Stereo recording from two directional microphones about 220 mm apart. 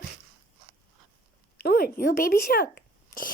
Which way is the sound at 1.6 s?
45° left (ahead or behind).